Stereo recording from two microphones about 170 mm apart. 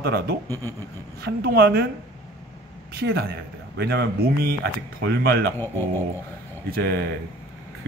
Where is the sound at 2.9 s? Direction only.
70° right (ahead or behind).